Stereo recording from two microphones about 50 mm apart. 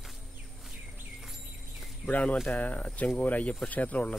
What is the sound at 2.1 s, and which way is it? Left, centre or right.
Speech, left.